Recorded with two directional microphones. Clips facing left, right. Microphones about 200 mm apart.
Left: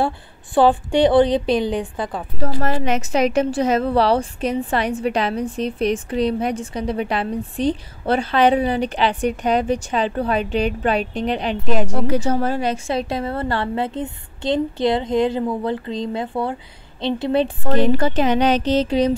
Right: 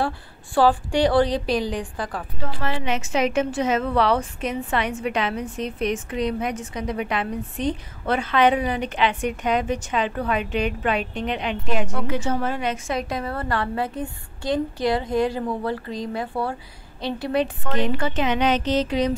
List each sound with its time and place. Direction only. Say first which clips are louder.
0.6 s a woman's voice: left 4 dB; 25° left (ahead or behind)
2.3 s a woman's voice: left 8 dB; 40° left (ahead or behind)